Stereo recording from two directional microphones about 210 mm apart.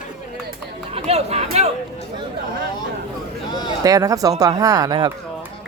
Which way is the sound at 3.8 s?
15° right (ahead or behind).